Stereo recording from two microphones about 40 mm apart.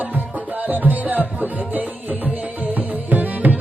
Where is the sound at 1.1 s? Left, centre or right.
Right.